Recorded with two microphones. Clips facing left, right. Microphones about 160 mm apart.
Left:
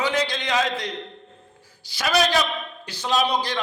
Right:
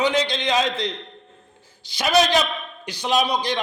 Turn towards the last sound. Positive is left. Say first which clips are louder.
# right 1 dB
turn(degrees=-15)  # may be behind; listen again after turning